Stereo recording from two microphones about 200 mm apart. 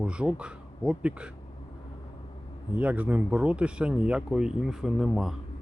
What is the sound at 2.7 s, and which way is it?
Speech, 5° right (ahead or behind).